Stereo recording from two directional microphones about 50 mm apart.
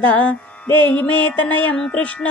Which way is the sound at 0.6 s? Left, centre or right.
Left.